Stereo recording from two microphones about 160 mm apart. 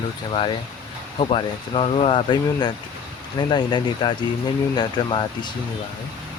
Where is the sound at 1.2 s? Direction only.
35° left (ahead or behind).